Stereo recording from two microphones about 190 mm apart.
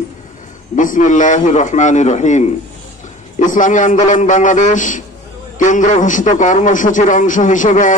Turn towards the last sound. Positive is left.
turn(degrees=40)  # may be behind; listen again after turning